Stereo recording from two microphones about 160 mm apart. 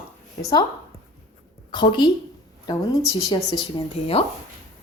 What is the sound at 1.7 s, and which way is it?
Speech, 30° left (ahead or behind).